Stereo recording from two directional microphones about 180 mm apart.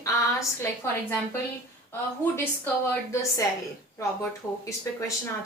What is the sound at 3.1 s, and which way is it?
Speech, 15° left (ahead or behind).